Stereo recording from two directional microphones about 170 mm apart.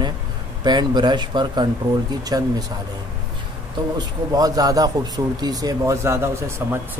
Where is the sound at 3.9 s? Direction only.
20° right (ahead or behind).